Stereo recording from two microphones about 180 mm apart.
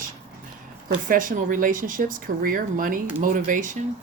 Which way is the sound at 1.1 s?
50° right (ahead or behind).